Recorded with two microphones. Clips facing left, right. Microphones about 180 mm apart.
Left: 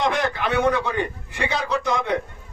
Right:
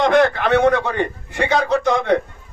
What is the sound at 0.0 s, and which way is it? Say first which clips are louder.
A man's voice: right 8 dB; 60° right (ahead or behind).